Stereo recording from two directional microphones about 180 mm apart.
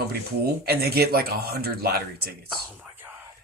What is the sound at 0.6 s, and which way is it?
Speech, 60° right (ahead or behind).